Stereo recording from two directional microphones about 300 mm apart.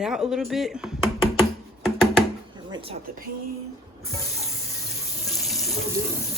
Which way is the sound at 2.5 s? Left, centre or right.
Centre.